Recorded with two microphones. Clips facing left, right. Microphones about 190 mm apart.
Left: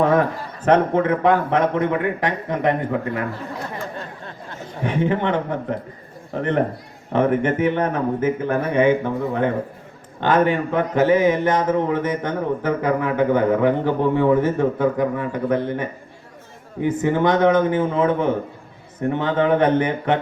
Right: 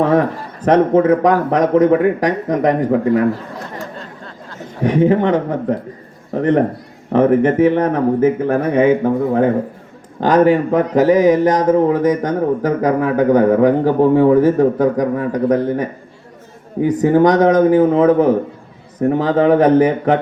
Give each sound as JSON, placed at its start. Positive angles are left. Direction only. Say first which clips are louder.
{"t": 0.0, "sound": "speech", "louder": "right 3 dB", "side_deg": -30}
{"t": 4.9, "sound": "speech", "louder": "right 7 dB", "side_deg": -35}